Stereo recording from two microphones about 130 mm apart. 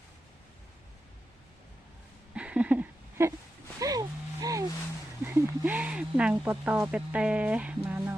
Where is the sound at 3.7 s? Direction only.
30° right (ahead or behind).